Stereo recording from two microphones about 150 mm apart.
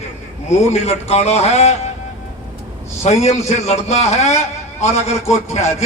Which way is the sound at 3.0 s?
45° left (ahead or behind).